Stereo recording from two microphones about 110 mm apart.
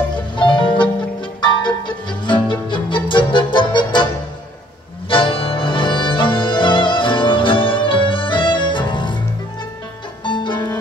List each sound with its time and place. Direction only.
0.4 s music: 45° left (ahead or behind)
5.1 s music: 55° left (ahead or behind)
10.2 s music: 45° left (ahead or behind)